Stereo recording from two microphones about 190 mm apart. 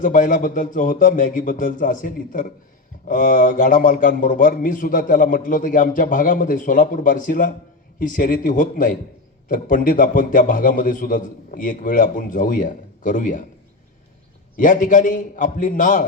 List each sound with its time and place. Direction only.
0.0 s a man's voice: 45° left (ahead or behind)
14.5 s a man's voice: 45° left (ahead or behind)